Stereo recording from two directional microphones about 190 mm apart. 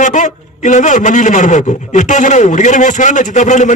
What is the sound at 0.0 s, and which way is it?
A man's voice, 40° left (ahead or behind).